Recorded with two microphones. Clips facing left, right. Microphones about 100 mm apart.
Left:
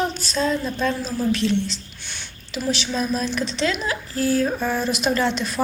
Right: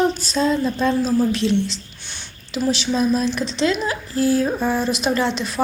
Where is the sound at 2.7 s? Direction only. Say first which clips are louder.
Right 5 dB; 20° right (ahead or behind).